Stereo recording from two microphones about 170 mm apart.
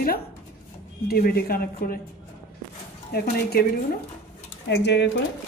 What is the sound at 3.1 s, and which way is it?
Speech, 70° left (ahead or behind).